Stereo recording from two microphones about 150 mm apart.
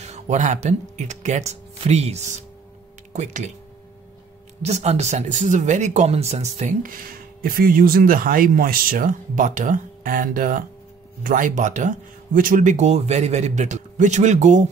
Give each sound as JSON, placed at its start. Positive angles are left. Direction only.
{"t": 0.0, "sound": "speech", "side_deg": -50}
{"t": 4.6, "sound": "a man's voice", "side_deg": -45}